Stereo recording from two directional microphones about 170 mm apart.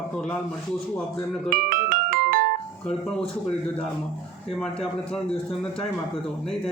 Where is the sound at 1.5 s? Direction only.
55° right (ahead or behind).